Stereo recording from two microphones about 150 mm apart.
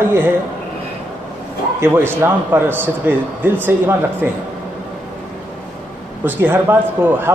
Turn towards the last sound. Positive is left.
turn(degrees=-15)  # may be behind; listen again after turning